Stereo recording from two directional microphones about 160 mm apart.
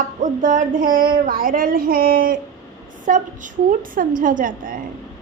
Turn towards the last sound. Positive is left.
turn(degrees=-60)  # may be behind; listen again after turning